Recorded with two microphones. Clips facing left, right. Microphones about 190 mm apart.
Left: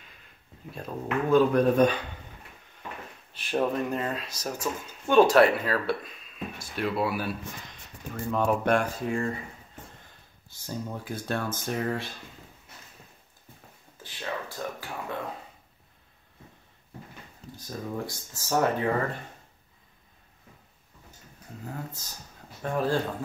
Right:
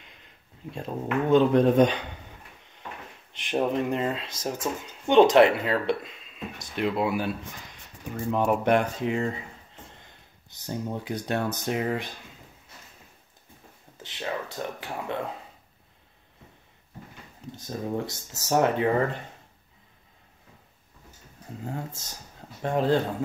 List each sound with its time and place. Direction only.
0.7 s speech: 25° right (ahead or behind)
3.3 s speech: 20° right (ahead or behind)
10.5 s speech: 20° right (ahead or behind)
14.0 s speech: 25° right (ahead or behind)
17.6 s speech: 25° right (ahead or behind)
21.6 s speech: 25° right (ahead or behind)